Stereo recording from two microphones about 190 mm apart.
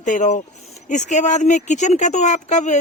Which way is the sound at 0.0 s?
40° left (ahead or behind).